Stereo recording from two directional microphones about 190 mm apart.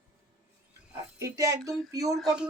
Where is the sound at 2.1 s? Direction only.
5° right (ahead or behind).